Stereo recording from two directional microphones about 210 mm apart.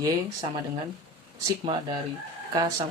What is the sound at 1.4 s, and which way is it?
Speech, 20° right (ahead or behind).